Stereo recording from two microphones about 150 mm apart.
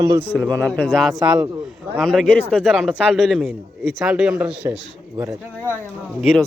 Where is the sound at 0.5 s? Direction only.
10° left (ahead or behind).